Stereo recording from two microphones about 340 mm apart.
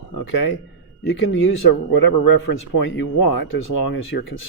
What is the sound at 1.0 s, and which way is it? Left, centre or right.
Speech, left.